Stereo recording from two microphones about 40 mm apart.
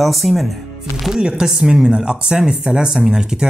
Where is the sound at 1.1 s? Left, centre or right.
Right.